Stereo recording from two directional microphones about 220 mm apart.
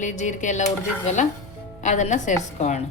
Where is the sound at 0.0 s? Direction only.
35° left (ahead or behind).